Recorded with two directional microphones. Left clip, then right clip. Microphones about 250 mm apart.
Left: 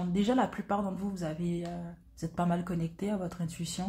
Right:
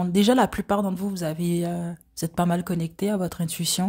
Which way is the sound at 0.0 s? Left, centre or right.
Right.